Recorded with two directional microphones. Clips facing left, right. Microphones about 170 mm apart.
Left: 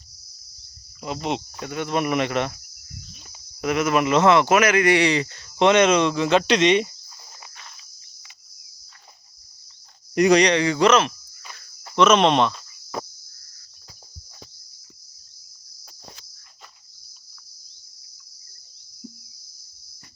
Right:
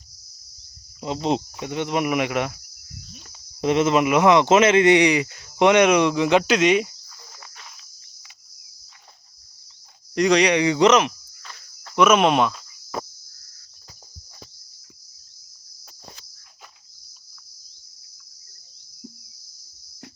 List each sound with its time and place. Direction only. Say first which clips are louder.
1.0 s speech: right 4 dB; 25° right (ahead or behind); by 2.6 s 10° right (ahead or behind)
3.6 s speech: right 3 dB; 25° right (ahead or behind)
4.0 s speech: right 1 dB; 15° right (ahead or behind)
10.2 s speech: left 2 dB; 5° left (ahead or behind)
10.4 s speech: right 1 dB; 15° right (ahead or behind)